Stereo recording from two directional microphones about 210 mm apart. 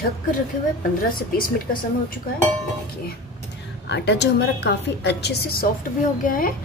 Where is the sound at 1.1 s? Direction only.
40° left (ahead or behind).